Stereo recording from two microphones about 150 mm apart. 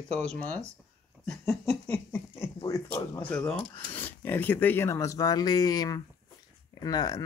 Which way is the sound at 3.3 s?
10° left (ahead or behind).